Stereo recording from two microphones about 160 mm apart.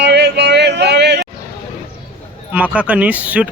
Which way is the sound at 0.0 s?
90° right.